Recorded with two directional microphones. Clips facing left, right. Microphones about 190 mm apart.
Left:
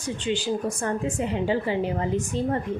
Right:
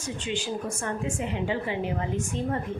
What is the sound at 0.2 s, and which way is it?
A woman's voice, 35° left (ahead or behind).